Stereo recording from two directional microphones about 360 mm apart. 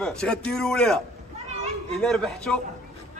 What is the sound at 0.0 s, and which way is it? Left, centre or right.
A man's voice, centre.